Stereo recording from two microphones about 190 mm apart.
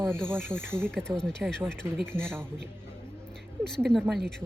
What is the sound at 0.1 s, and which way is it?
Speech, 10° right (ahead or behind).